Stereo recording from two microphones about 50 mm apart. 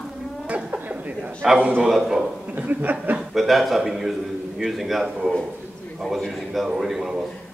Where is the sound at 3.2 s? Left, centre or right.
Centre.